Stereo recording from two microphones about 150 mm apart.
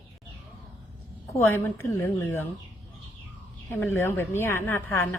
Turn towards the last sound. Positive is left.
turn(degrees=15)  # may be behind; listen again after turning